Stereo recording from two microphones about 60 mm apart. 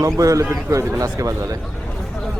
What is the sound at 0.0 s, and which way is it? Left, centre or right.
Speech, right.